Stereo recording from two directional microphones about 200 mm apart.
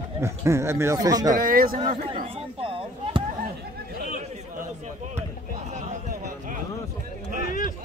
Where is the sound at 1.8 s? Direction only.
25° right (ahead or behind).